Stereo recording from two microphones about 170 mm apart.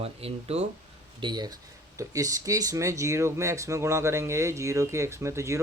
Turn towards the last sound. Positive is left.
turn(degrees=-15)  # may be behind; listen again after turning